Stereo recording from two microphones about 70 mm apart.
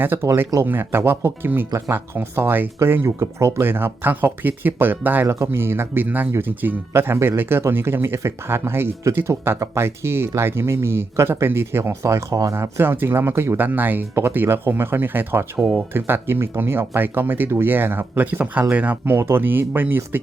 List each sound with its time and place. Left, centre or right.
0.0 s speech: right
5.3 s speech: right
12.8 s speech: right
15.5 s speech: centre
15.9 s speech: right